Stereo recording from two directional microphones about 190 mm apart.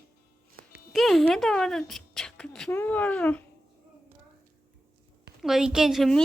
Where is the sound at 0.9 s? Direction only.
Centre (ahead or behind).